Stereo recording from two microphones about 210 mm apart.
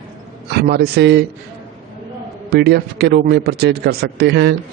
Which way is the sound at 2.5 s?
50° right (ahead or behind).